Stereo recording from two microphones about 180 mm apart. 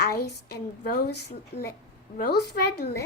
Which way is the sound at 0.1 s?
60° left (ahead or behind).